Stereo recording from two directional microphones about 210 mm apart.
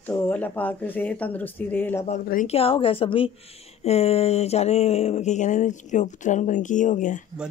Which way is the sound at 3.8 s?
30° left (ahead or behind).